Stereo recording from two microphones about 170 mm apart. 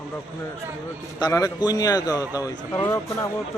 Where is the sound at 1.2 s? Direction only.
20° left (ahead or behind).